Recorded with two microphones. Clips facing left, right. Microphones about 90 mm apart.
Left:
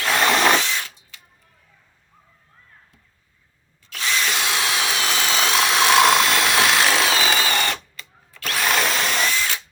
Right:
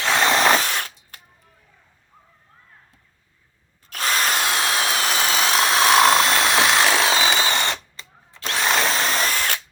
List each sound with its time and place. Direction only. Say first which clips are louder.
0.0 s snort: even; 30° right (ahead or behind)
0.5 s a sound: right 1 dB; 50° right (ahead or behind)
3.8 s drill: right 2 dB; 45° right (ahead or behind)
5.5 s a sound: right 1 dB; 40° right (ahead or behind)
6.1 s ratchet: even; 35° right (ahead or behind)
6.7 s wood: right 1 dB; centre (ahead or behind)
7.0 s drill: right 1 dB; 30° right (ahead or behind)